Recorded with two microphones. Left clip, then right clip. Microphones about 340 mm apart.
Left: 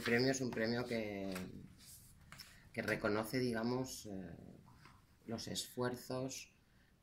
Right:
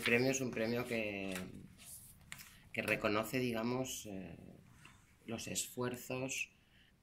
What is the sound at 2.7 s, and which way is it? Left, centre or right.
Speech, centre.